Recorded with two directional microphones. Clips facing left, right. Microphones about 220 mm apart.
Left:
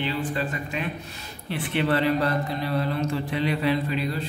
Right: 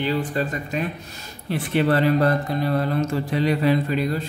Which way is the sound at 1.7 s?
45° right (ahead or behind).